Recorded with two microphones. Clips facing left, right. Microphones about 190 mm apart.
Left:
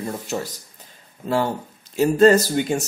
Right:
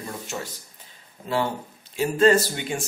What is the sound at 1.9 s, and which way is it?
Speech, 40° left (ahead or behind).